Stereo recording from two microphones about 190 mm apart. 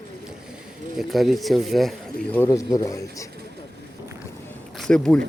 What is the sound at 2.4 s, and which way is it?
Speech, 15° left (ahead or behind).